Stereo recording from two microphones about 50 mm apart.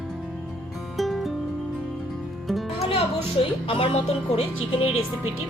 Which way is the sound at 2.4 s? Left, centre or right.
Centre.